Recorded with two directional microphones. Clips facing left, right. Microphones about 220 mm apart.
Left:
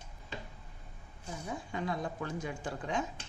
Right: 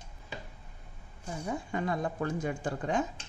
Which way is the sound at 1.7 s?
50° right (ahead or behind).